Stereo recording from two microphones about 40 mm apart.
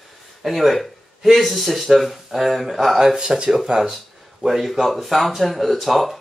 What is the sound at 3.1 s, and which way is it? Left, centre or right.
Speech, right.